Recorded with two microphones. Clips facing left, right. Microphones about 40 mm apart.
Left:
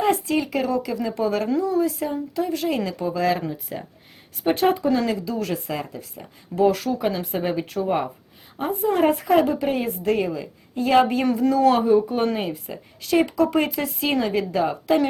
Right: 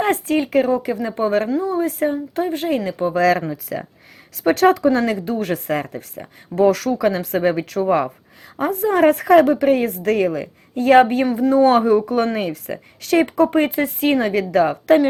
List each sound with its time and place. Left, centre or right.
0.0 s speech: right
1.8 s speech: right
3.2 s speech: right
4.4 s speech: right
4.9 s speech: right
11.3 s speech: right
11.8 s speech: right
13.3 s speech: right